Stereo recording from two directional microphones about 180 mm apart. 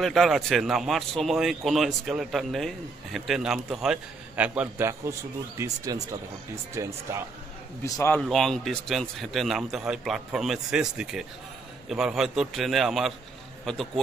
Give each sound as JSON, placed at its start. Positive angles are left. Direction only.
{"t": 0.0, "sound": "speech", "side_deg": 0}
{"t": 7.8, "sound": "a man's voice", "side_deg": 15}
{"t": 8.2, "sound": "speech", "side_deg": 0}